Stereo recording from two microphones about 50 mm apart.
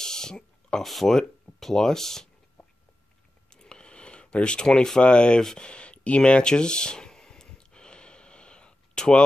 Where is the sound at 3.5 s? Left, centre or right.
Centre.